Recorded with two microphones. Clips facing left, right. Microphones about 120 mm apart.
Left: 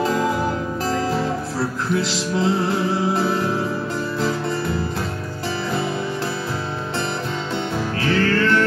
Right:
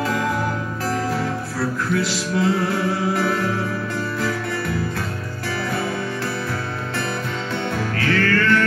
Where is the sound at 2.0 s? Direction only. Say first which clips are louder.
Even; 25° left (ahead or behind).